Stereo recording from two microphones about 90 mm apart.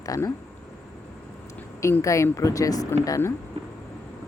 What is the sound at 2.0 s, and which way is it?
Speech, 35° left (ahead or behind).